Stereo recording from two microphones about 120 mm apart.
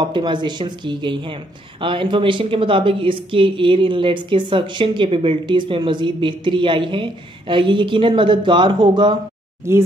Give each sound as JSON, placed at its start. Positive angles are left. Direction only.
{"t": 0.0, "sound": "speech", "side_deg": -40}
{"t": 9.6, "sound": "speech", "side_deg": -20}